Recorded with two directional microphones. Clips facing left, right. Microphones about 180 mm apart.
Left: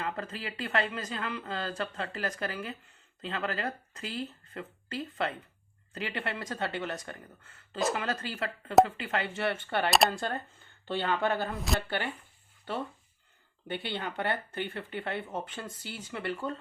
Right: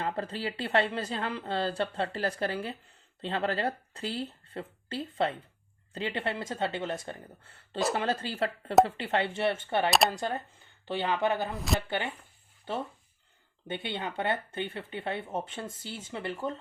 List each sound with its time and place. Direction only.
0.0 s speech: 30° right (ahead or behind); by 11.5 s 15° right (ahead or behind)
11.5 s speech: centre (ahead or behind)
11.9 s speech: 20° right (ahead or behind)
13.7 s speech: 20° right (ahead or behind)